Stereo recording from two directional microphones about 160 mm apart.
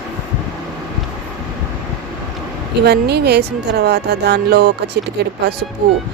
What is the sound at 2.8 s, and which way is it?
Speech, 90° right.